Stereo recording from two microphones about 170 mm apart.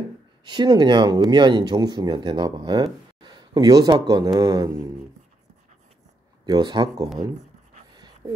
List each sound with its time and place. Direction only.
0.5 s speech: 25° right (ahead or behind)
6.4 s speech: 25° right (ahead or behind)